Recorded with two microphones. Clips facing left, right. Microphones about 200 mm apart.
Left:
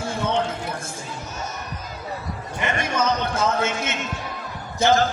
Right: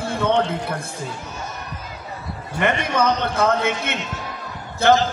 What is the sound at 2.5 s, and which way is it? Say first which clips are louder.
A man's voice: right 4 dB; 60° right (ahead or behind).